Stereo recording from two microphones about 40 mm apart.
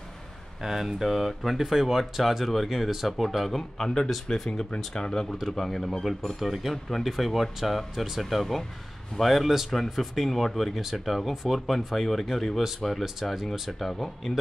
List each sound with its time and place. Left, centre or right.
0.6 s speech: centre
5.4 s speech: centre
5.7 s speech: centre
6.4 s speech: centre